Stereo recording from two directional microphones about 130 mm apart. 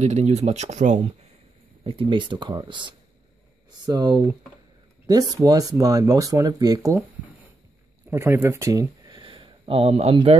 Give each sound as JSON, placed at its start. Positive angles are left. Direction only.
{"t": 0.0, "sound": "speech", "side_deg": -60}
{"t": 1.9, "sound": "speech", "side_deg": -40}
{"t": 5.3, "sound": "speech", "side_deg": -30}
{"t": 8.1, "sound": "speech", "side_deg": -20}